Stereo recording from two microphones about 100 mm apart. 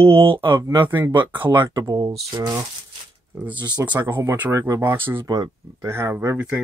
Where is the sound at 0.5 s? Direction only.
30° right (ahead or behind).